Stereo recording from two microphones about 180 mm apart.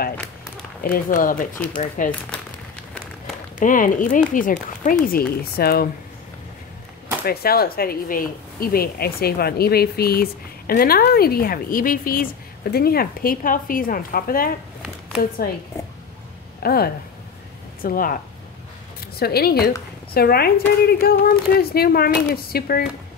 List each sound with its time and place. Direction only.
1.1 s a woman's voice: 45° left (ahead or behind)
3.5 s a woman's voice: 45° left (ahead or behind)
7.2 s a woman's voice: 55° left (ahead or behind)
16.6 s a woman's voice: 60° left (ahead or behind)